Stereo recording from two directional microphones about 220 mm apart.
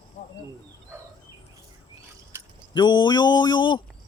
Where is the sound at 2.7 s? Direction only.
20° left (ahead or behind).